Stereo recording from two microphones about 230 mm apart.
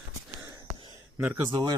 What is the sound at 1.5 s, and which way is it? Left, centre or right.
Speech, centre.